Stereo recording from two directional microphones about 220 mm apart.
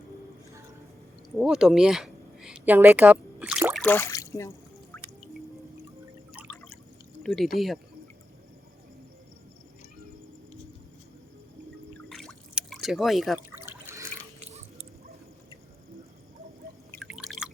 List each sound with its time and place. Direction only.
1.4 s speech: centre (ahead or behind)
3.8 s speech: 10° left (ahead or behind)
7.2 s speech: centre (ahead or behind)
12.0 s a sound: centre (ahead or behind)
13.7 s water: 10° right (ahead or behind)
14.4 s chewing: 30° right (ahead or behind)
17.1 s drip: centre (ahead or behind)